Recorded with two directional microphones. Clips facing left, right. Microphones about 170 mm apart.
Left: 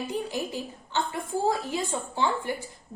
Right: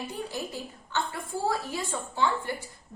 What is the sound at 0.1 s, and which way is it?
A woman's voice, 20° left (ahead or behind).